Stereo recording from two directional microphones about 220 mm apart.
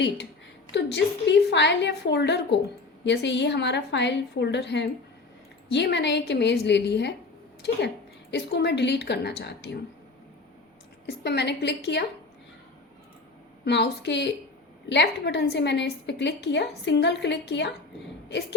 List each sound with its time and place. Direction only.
0.7 s a woman's voice: 50° left (ahead or behind)
8.3 s a woman's voice: 50° left (ahead or behind)
11.0 s a woman's voice: 50° left (ahead or behind)
13.7 s a woman's voice: 50° left (ahead or behind)